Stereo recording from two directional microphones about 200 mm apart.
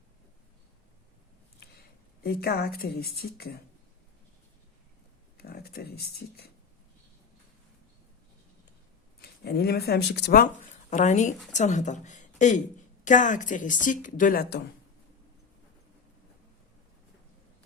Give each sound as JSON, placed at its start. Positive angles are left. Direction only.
{"t": 2.2, "sound": "a woman's voice", "side_deg": 50}
{"t": 5.4, "sound": "speech", "side_deg": 50}
{"t": 9.2, "sound": "a woman's voice", "side_deg": 50}